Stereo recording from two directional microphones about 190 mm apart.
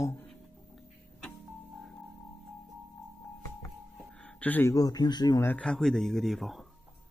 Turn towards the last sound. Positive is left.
turn(degrees=0)  # may be behind; listen again after turning